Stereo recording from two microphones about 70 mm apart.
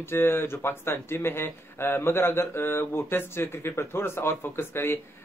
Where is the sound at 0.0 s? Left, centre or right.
Left.